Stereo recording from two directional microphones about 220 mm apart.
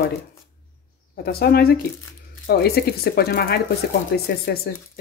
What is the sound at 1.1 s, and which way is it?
Speech, 45° left (ahead or behind).